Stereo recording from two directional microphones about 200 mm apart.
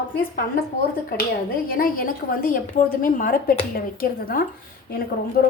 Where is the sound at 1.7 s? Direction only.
45° left (ahead or behind).